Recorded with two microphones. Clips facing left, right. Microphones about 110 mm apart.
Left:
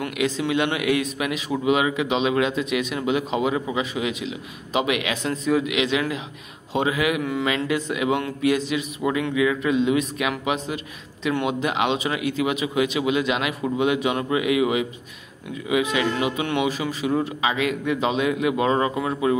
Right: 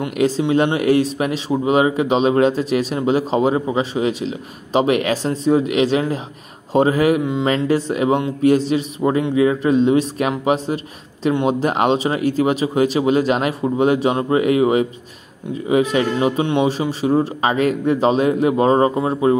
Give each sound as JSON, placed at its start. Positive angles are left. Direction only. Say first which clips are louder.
{"t": 0.1, "sound": "speech", "louder": "right 8 dB", "side_deg": -35}
{"t": 17.4, "sound": "speech", "louder": "right 6 dB", "side_deg": -45}